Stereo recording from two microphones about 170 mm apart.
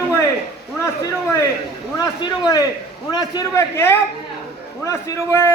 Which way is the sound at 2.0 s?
20° left (ahead or behind).